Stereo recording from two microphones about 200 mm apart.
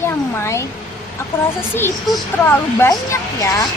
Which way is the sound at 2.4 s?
10° left (ahead or behind).